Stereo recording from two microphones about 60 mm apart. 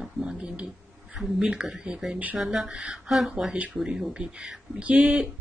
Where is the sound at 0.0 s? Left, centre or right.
Centre.